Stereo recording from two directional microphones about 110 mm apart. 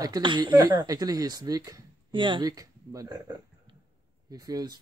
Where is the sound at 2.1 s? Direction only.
45° right (ahead or behind).